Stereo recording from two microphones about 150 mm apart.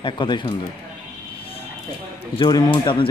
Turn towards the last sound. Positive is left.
turn(degrees=35)  # may be behind; listen again after turning